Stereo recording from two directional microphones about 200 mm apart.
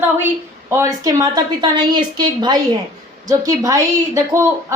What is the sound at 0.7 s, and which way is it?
A woman's voice, 15° right (ahead or behind).